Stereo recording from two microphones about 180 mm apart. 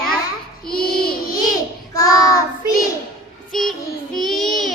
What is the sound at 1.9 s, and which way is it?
Child singing, 20° left (ahead or behind).